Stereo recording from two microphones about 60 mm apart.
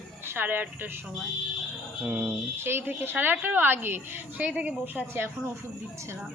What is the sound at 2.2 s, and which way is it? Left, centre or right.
Speech, right.